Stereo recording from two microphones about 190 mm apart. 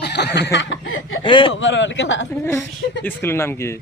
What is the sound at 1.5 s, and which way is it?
Chuckle, 80° left.